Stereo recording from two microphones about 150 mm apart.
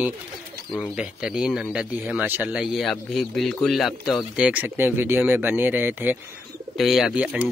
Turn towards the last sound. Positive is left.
turn(degrees=-10)  # may be behind; listen again after turning